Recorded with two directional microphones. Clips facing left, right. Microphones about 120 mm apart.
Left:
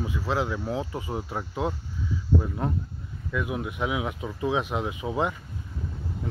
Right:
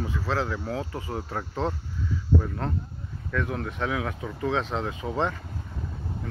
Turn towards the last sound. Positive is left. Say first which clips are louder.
# even
turn(degrees=15)  # may be behind; listen again after turning